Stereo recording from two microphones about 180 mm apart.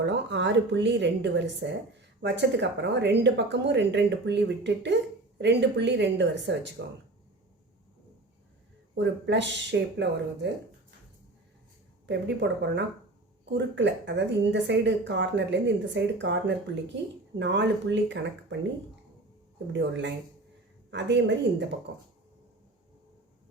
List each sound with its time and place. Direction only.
0.0 s a woman's voice: 85° right
9.0 s speech: 80° right
12.0 s a woman's voice: 75° right (ahead or behind)
19.8 s a woman's voice: 80° right